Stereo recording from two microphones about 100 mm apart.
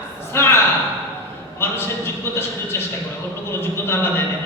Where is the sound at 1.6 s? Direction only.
20° left (ahead or behind).